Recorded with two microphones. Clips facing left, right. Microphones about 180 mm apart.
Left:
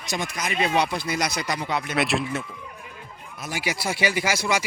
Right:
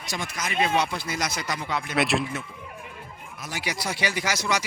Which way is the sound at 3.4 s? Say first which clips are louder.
Left 3 dB; 10° left (ahead or behind).